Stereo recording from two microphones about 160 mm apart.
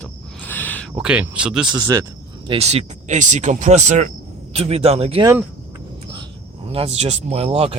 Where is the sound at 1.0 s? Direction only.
5° right (ahead or behind).